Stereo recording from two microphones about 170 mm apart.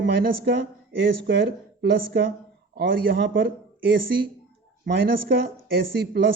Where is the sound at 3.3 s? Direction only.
90° right.